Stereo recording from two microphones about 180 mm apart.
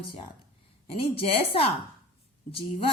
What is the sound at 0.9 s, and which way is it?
Speech, 30° left (ahead or behind).